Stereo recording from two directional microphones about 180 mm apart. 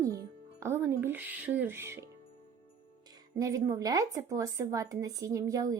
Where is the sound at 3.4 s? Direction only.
20° right (ahead or behind).